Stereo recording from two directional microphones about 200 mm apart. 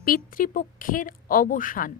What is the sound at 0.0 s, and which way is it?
A woman's voice, 45° left (ahead or behind).